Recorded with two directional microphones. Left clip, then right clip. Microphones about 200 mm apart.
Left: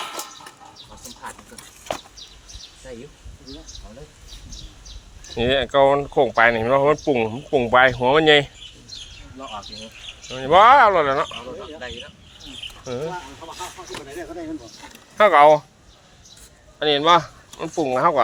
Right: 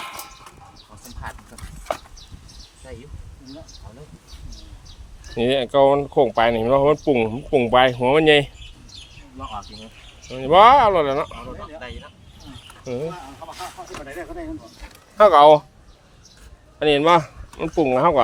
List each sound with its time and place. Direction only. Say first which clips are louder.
5.3 s speech: even; 30° right (ahead or behind)
10.2 s speech: right 1 dB; 25° right (ahead or behind)
12.8 s speech: right 2 dB; 25° right (ahead or behind)
13.8 s speech: even; 15° right (ahead or behind)
15.2 s speech: right 2 dB; 50° right (ahead or behind)
16.8 s speech: even; 50° right (ahead or behind)